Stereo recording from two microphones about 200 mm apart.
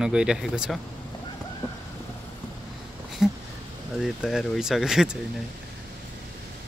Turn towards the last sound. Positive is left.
turn(degrees=0)  # may be behind; listen again after turning